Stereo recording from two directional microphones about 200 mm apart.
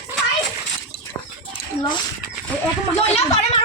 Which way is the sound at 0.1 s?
10° right (ahead or behind).